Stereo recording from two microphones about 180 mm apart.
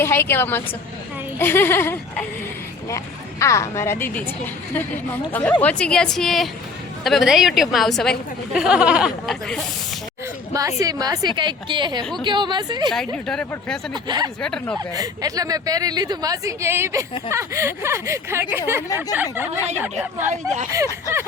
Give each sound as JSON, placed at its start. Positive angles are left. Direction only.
{"t": 0.0, "sound": "a woman's voice", "side_deg": 15}
{"t": 10.5, "sound": "speech", "side_deg": -20}
{"t": 12.9, "sound": "a woman's voice", "side_deg": 5}
{"t": 13.9, "sound": "speech", "side_deg": -25}
{"t": 14.4, "sound": "a woman's voice", "side_deg": 5}
{"t": 14.9, "sound": "speech", "side_deg": -20}